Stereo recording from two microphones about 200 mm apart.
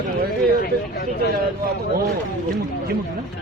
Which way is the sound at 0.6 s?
50° left (ahead or behind).